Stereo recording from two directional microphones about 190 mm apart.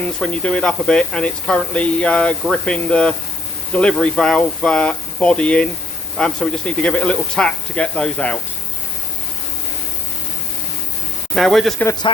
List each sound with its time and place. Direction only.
0.2 s speech: 5° left (ahead or behind)
11.3 s speech: centre (ahead or behind)
12.1 s speech: 25° left (ahead or behind)